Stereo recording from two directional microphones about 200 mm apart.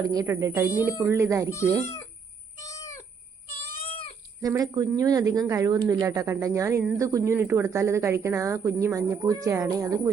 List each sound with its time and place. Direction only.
0.0 s speech: 15° right (ahead or behind)
2.6 s cat: 15° left (ahead or behind)
3.8 s cat: 30° left (ahead or behind)
4.4 s speech: 15° right (ahead or behind)